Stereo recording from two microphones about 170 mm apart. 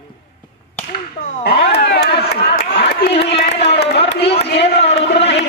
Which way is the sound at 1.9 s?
70° left (ahead or behind).